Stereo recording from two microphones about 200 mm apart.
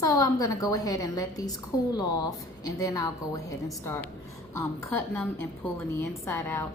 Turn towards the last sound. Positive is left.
turn(degrees=10)  # may be behind; listen again after turning